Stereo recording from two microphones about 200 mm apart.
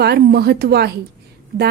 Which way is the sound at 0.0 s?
55° right (ahead or behind).